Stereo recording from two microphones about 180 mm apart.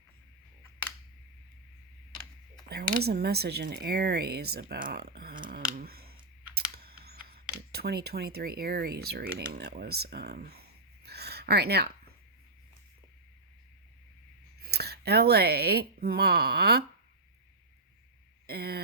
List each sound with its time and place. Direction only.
2.6 s speech: 60° right (ahead or behind)
5.4 s scissors: 50° right (ahead or behind)
6.8 s computer keyboard: 60° right (ahead or behind)
7.7 s speech: 60° right (ahead or behind)
14.6 s speech: 60° right (ahead or behind)
18.4 s speech: 60° right (ahead or behind)